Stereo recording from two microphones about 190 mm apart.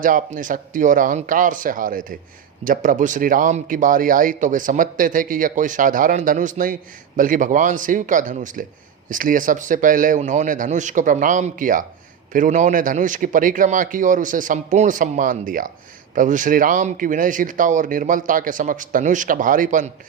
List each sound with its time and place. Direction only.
0.0 s speech: 45° right (ahead or behind)